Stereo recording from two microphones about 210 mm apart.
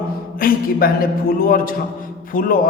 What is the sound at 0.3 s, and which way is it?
A man's voice, 45° left (ahead or behind).